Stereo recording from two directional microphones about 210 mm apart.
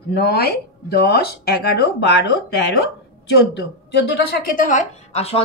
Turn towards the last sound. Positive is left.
turn(degrees=30)  # may be behind; listen again after turning